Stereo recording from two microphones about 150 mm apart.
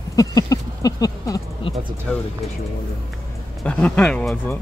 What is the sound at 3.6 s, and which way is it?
Speech, 10° left (ahead or behind).